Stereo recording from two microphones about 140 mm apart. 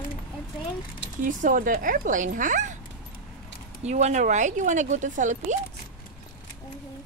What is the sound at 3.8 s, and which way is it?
Speech, 50° right (ahead or behind).